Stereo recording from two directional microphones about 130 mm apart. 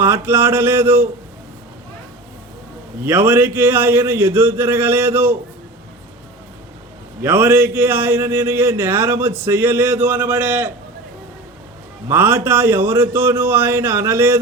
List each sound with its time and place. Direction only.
0.0 s a man's voice: 15° right (ahead or behind)
3.0 s a man's voice: 15° right (ahead or behind)
7.2 s a man's voice: 15° right (ahead or behind)
12.0 s a man's voice: 15° right (ahead or behind)